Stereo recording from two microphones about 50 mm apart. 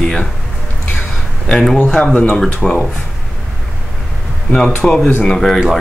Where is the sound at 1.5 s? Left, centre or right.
Centre.